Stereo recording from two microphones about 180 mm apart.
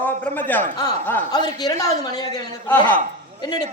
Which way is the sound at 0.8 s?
20° left (ahead or behind).